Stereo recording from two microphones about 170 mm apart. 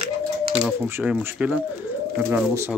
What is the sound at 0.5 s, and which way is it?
Speech, 5° right (ahead or behind).